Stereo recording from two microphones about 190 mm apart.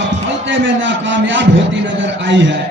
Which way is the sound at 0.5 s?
80° right.